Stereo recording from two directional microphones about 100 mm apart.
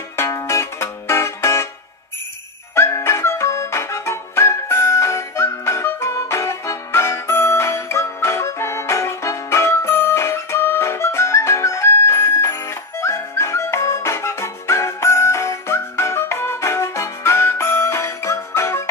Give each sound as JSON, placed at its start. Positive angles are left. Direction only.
{"t": 0.1, "sound": "music", "side_deg": 30}
{"t": 2.7, "sound": "music", "side_deg": 25}